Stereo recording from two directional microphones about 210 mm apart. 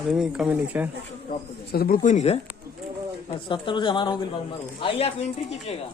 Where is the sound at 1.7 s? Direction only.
45° left (ahead or behind); by 5.5 s 30° left (ahead or behind).